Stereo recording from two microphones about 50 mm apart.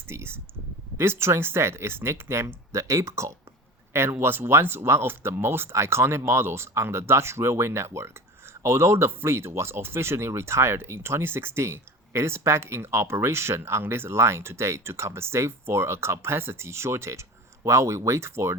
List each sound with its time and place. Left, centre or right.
0.1 s speech: right
2.7 s speech: right
4.2 s speech: right